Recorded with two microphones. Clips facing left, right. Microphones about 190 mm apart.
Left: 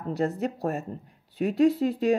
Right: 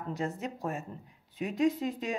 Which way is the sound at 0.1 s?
35° left (ahead or behind).